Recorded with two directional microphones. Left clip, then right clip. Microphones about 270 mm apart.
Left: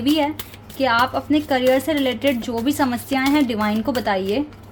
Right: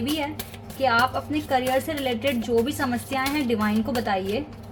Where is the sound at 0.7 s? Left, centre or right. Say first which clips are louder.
Left 3 dB; left.